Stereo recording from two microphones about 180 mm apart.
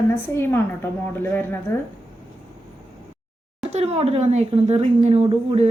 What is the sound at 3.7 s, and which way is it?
A woman's voice, 35° right (ahead or behind).